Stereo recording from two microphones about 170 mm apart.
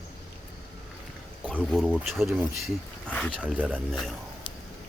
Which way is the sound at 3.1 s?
5° left (ahead or behind).